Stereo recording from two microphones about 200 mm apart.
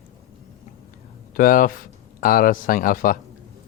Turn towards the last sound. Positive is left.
turn(degrees=45)  # may be behind; listen again after turning